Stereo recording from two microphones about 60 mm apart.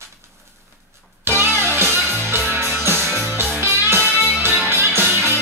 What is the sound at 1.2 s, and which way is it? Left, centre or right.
Music, right.